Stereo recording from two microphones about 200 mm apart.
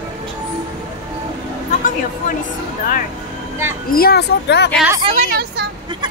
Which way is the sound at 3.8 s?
50° left (ahead or behind).